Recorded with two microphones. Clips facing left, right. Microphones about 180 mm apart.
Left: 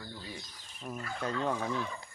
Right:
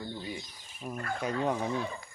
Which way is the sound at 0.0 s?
20° right (ahead or behind).